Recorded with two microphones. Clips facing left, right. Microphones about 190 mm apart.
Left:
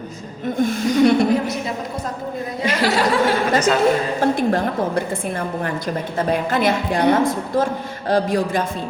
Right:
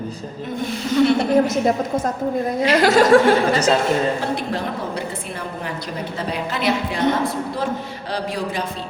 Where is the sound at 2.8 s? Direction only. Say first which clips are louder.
Right 4 dB; 45° right (ahead or behind).